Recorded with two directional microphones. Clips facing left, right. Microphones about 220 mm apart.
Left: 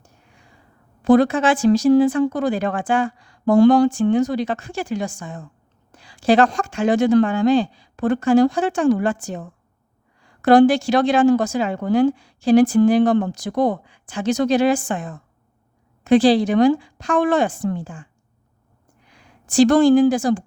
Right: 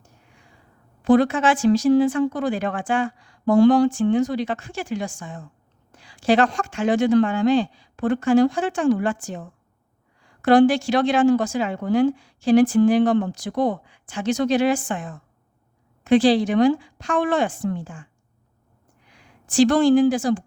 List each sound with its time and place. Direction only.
1.0 s a woman's voice: 40° left (ahead or behind)
10.4 s a woman's voice: 40° left (ahead or behind)
19.5 s a woman's voice: 45° left (ahead or behind)